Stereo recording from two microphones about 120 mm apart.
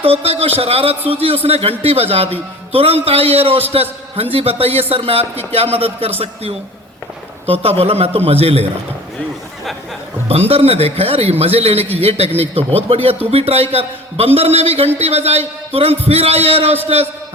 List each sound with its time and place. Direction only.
0.0 s a man's voice: 55° right (ahead or behind)
10.5 s a man's voice: 55° right (ahead or behind)